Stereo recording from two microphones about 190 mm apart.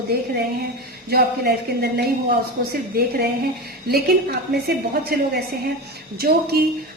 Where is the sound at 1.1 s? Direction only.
55° right (ahead or behind).